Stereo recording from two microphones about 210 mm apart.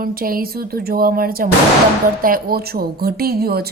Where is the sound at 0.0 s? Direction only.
45° right (ahead or behind).